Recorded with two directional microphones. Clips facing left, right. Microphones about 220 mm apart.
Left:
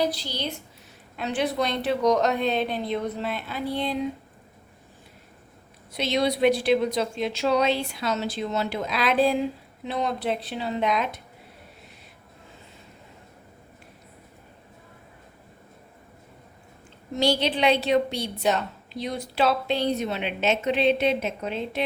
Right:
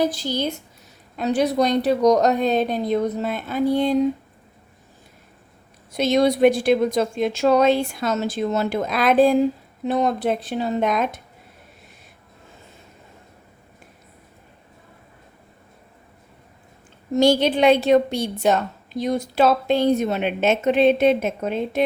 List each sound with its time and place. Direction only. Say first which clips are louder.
0.0 s a woman's voice: right 5 dB; 50° right (ahead or behind)
5.9 s a woman's voice: right 6 dB; 45° right (ahead or behind)
17.2 s a woman's voice: right 7 dB; 45° right (ahead or behind)